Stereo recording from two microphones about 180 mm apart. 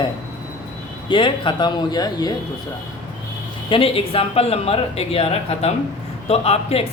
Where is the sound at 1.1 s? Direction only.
25° left (ahead or behind).